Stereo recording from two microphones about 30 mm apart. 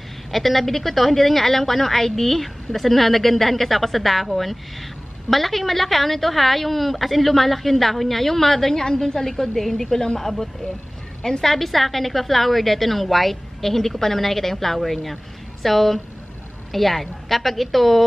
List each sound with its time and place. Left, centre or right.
0.3 s a woman's voice: centre
9.8 s a woman's voice: centre
11.4 s a woman's voice: centre